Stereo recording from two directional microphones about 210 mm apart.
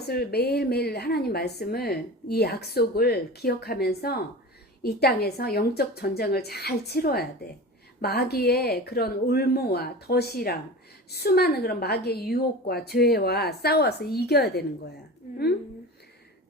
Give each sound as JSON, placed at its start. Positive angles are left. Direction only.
{"t": 0.1, "sound": "a woman's voice", "side_deg": 50}